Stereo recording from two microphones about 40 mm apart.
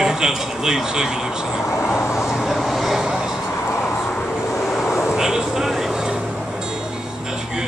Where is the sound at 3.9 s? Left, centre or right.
Left.